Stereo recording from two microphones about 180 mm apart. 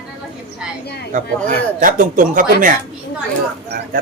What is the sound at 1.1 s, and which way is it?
Speech, 45° right (ahead or behind).